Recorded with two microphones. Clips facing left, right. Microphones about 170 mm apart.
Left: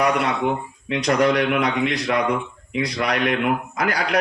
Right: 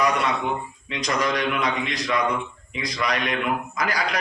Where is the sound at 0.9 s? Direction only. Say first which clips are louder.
Left 7 dB; 65° left (ahead or behind).